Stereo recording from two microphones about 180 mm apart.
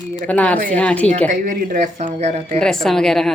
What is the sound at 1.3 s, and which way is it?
Speech, 45° right (ahead or behind).